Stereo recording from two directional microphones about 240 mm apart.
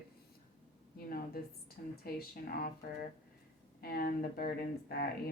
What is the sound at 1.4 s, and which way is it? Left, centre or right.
A woman's voice, left.